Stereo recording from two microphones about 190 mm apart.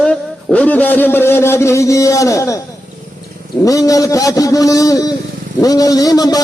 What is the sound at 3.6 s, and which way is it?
A man's voice, 20° left (ahead or behind).